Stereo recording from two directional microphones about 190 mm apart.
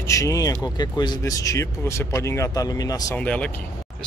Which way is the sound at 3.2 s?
5° left (ahead or behind).